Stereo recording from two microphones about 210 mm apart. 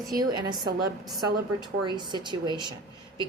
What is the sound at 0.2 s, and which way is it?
Speech, 20° right (ahead or behind).